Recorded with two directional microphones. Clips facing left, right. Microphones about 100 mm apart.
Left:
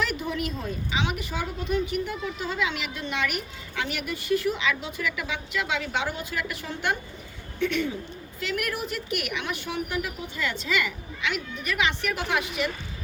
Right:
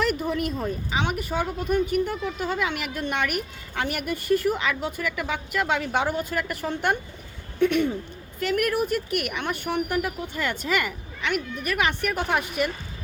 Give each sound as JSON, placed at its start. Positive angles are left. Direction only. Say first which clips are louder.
{"t": 0.0, "sound": "a woman's voice", "louder": "right 4 dB", "side_deg": -45}